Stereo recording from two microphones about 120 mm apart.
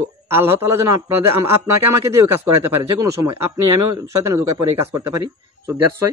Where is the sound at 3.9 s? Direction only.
30° right (ahead or behind).